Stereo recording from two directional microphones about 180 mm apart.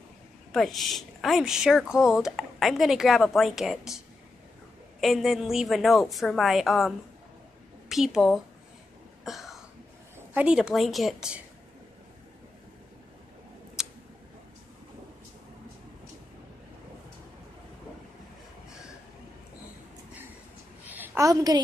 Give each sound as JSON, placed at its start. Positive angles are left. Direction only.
{"t": 0.5, "sound": "speech", "side_deg": 0}
{"t": 5.0, "sound": "speech", "side_deg": 0}
{"t": 7.9, "sound": "speech", "side_deg": 0}
{"t": 9.2, "sound": "cough", "side_deg": 0}
{"t": 10.3, "sound": "speech", "side_deg": -5}
{"t": 20.8, "sound": "a sound", "side_deg": -10}